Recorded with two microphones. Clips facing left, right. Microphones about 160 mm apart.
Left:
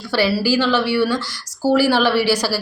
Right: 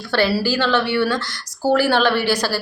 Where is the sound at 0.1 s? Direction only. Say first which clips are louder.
Left 1 dB; 5° left (ahead or behind).